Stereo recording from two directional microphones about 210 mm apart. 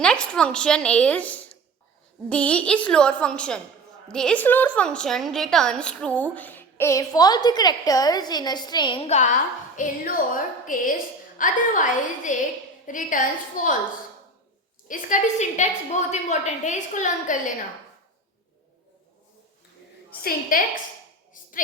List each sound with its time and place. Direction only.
0.0 s a woman's voice: 5° left (ahead or behind); by 13.7 s 40° left (ahead or behind)
14.8 s a woman's voice: 35° left (ahead or behind)
20.5 s a woman's voice: 40° left (ahead or behind)
21.4 s a sound: 40° left (ahead or behind)